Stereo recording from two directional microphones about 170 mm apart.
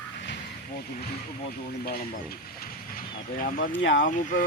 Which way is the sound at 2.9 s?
55° left (ahead or behind).